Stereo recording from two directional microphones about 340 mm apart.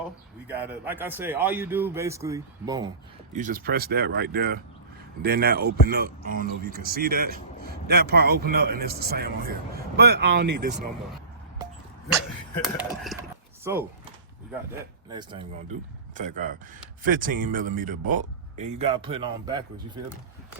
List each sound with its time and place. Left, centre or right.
0.4 s a man's voice: centre
3.3 s speech: right
11.6 s a sound: centre
13.7 s speech: centre
15.1 s speech: centre